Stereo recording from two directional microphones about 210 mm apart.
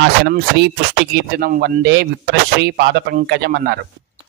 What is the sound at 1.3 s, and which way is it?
A man's voice, 45° right (ahead or behind).